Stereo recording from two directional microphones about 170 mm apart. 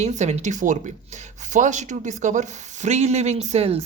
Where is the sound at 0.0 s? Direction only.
40° right (ahead or behind).